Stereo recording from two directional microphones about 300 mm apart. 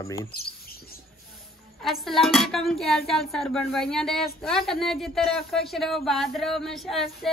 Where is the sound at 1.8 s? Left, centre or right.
Centre.